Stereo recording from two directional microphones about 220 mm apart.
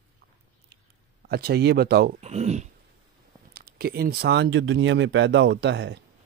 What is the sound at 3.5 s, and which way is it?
Speech, 45° right (ahead or behind).